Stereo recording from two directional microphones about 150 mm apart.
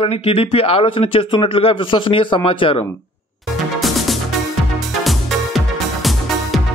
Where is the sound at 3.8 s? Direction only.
Centre (ahead or behind).